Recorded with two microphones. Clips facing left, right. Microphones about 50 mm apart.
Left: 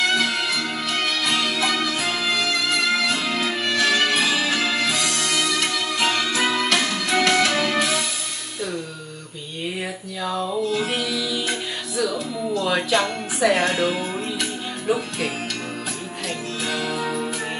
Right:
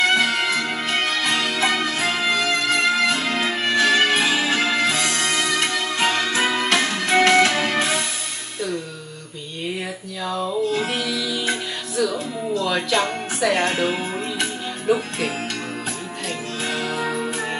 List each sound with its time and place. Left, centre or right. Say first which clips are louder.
0.1 s music: right 3 dB; right
10.2 s a sound: even; centre
10.9 s music: even; centre
13.4 s a woman's voice: left 1 dB; centre
13.7 s music: even; right
14.9 s speech: right 2 dB; centre
16.6 s music: right 1 dB; right